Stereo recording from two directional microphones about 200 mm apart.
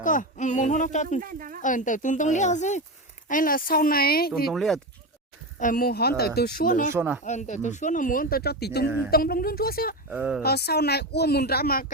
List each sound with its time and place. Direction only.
0.0 s speech: 40° left (ahead or behind)
1.2 s speech: 45° right (ahead or behind)
1.6 s speech: 40° left (ahead or behind)
4.5 s speech: centre (ahead or behind)
5.5 s speech: 45° left (ahead or behind)
6.9 s speech: 10° right (ahead or behind)
7.3 s speech: 35° left (ahead or behind)
10.1 s speech: 5° right (ahead or behind)
10.4 s speech: 50° left (ahead or behind)